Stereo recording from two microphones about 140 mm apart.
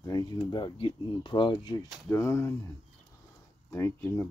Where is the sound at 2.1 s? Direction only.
20° left (ahead or behind).